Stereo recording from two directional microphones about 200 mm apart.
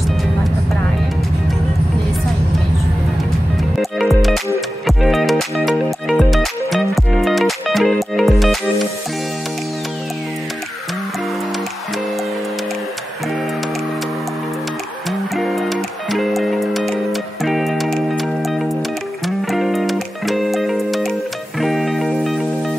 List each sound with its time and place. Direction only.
4.0 s music: centre (ahead or behind)
15.0 s music: centre (ahead or behind)